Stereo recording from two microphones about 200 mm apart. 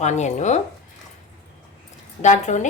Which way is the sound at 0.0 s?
35° left (ahead or behind).